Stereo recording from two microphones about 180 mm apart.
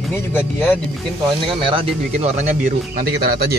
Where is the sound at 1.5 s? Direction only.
30° right (ahead or behind).